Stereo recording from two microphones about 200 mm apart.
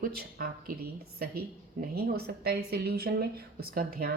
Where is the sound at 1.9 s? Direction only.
50° right (ahead or behind).